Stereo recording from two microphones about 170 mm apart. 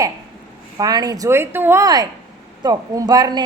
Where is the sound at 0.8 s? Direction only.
20° right (ahead or behind).